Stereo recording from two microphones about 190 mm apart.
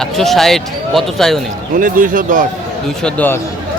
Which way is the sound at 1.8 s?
45° right (ahead or behind).